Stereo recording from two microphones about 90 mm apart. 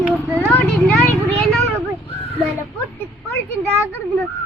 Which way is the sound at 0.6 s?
15° left (ahead or behind).